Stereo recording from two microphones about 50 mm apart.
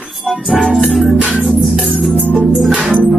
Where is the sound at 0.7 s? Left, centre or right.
Centre.